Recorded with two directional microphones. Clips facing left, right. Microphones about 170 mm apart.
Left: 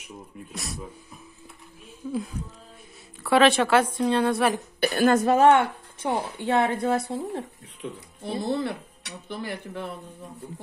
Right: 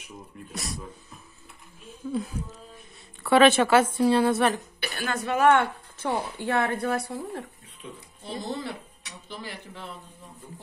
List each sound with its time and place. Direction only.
0.5 s speech: centre (ahead or behind)
2.0 s speech: centre (ahead or behind)
3.3 s speech: centre (ahead or behind)
4.7 s speech: 45° left (ahead or behind)
5.5 s a woman's voice: 20° left (ahead or behind)
8.4 s speech: 60° left (ahead or behind)